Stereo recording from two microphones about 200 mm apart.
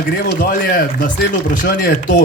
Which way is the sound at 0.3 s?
45° left (ahead or behind).